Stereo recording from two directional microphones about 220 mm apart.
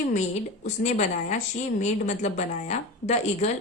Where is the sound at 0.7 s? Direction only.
30° left (ahead or behind).